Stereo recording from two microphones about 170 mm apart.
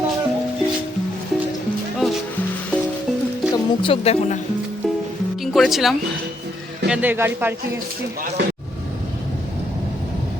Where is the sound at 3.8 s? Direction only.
35° left (ahead or behind).